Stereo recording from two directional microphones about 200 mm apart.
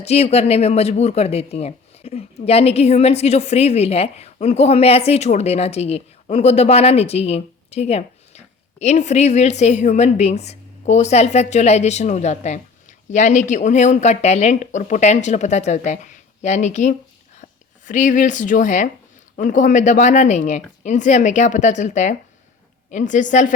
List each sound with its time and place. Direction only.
0.0 s a woman's voice: 30° left (ahead or behind)